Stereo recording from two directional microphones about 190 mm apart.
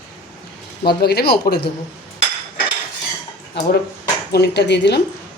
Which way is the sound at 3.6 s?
60° left (ahead or behind).